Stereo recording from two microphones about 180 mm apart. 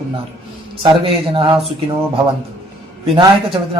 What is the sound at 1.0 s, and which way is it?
Speech, 30° right (ahead or behind).